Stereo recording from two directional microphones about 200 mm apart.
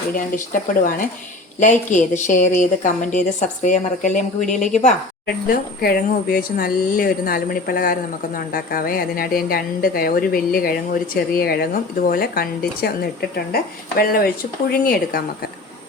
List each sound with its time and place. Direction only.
0.3 s a woman's voice: 40° left (ahead or behind)
5.2 s speech: 50° left (ahead or behind)
14.7 s speech: 50° left (ahead or behind)